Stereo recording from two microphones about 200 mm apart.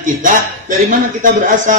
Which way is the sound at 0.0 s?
40° right (ahead or behind).